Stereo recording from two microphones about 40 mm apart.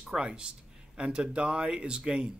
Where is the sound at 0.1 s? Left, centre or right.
Centre.